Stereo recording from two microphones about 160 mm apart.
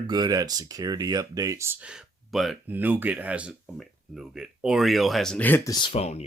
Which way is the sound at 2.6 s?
10° right (ahead or behind).